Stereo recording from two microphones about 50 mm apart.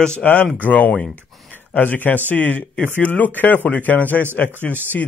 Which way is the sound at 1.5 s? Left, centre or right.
Left.